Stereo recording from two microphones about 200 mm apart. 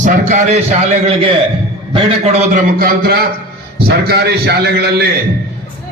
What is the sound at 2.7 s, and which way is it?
A man's voice, 50° right (ahead or behind).